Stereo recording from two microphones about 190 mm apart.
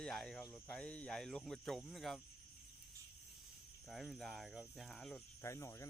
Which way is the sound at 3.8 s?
Centre (ahead or behind).